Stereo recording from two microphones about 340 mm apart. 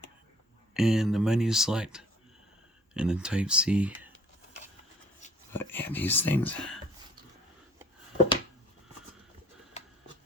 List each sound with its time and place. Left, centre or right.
0.7 s speech: centre
5.2 s a sound: left
5.5 s speech: centre